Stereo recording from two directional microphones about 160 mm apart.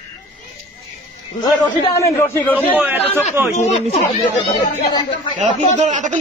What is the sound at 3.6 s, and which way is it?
Speech, 45° left (ahead or behind).